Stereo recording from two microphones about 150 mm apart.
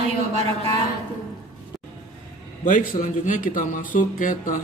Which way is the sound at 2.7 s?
60° left (ahead or behind).